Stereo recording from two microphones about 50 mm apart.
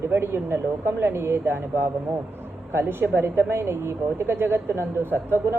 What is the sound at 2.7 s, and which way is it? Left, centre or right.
Speech, right.